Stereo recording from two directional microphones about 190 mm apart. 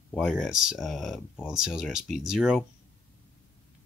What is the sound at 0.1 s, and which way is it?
Speech, centre (ahead or behind).